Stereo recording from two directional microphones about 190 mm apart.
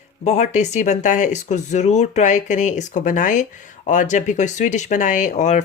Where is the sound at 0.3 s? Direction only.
35° left (ahead or behind).